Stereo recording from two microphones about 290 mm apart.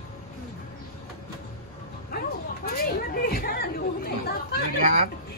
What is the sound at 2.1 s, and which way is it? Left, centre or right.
Chatter, left.